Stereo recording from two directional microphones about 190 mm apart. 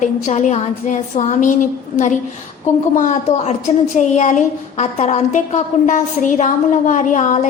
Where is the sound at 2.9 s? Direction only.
35° left (ahead or behind).